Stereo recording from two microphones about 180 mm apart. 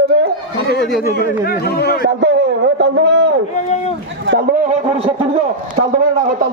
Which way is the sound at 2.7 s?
80° right.